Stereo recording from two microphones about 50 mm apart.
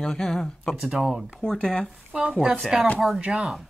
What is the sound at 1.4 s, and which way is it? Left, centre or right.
Speech, centre.